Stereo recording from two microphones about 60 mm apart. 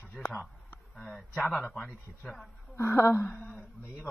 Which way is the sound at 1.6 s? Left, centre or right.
Centre.